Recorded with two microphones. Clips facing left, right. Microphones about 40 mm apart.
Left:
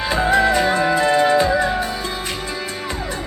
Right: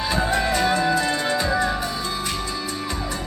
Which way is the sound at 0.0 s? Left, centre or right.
Left.